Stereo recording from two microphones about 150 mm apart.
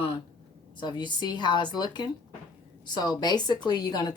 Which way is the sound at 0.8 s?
30° left (ahead or behind).